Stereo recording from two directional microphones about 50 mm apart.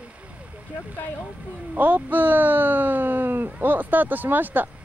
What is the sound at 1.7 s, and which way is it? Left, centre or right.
Speech, right.